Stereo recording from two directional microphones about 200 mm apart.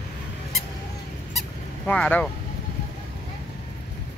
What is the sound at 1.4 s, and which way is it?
Honk, 5° left (ahead or behind).